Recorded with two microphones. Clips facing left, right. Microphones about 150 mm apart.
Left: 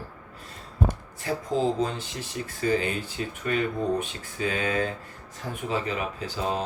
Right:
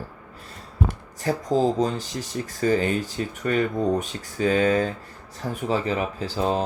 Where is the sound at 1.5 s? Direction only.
40° right (ahead or behind).